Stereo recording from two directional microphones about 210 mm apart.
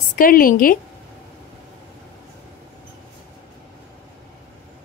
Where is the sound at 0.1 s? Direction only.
40° left (ahead or behind).